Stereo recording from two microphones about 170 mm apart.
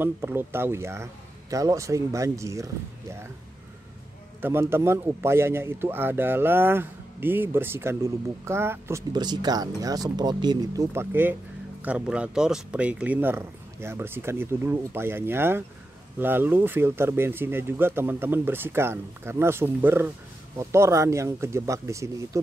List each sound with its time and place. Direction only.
0.0 s a man's voice: 15° right (ahead or behind)
4.4 s a man's voice: 15° right (ahead or behind)
9.1 s a man's voice: 25° right (ahead or behind)